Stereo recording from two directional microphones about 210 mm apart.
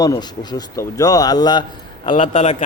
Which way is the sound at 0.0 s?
20° left (ahead or behind).